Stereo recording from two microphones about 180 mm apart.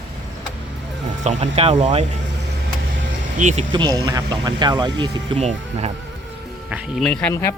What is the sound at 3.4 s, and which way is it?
Speech, 40° right (ahead or behind).